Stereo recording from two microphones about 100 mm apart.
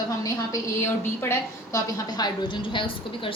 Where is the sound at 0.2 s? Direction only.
30° left (ahead or behind).